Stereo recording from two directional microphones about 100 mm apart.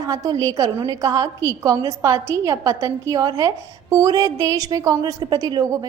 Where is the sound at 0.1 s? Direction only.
40° right (ahead or behind).